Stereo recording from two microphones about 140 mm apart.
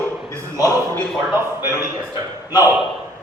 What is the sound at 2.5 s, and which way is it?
Speech, 25° left (ahead or behind).